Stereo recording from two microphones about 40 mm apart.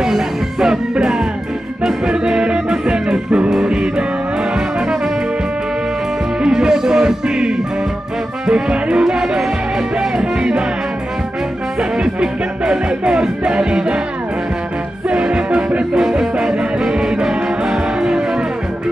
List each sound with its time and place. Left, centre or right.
0.0 s music: centre
1.9 s music: centre
6.4 s music: centre
12.0 s music: right
15.0 s music: right
16.0 s music: centre